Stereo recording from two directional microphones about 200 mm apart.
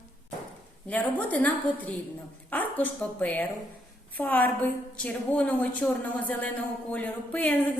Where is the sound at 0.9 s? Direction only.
5° left (ahead or behind).